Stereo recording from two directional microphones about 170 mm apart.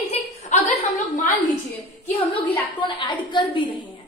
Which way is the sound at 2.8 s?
30° left (ahead or behind).